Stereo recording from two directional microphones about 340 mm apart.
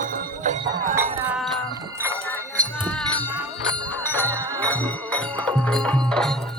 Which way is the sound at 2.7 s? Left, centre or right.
Centre.